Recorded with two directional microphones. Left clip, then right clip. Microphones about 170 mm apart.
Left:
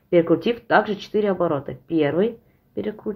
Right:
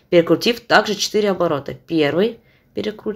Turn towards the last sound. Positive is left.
turn(degrees=-15)  # may be behind; listen again after turning